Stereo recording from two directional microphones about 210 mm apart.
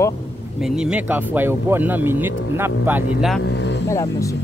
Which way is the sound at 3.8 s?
15° left (ahead or behind).